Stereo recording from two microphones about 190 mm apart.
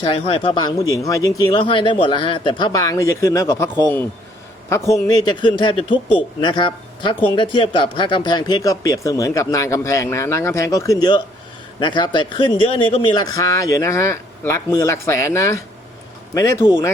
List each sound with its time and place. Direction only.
0.3 s speech: 30° left (ahead or behind)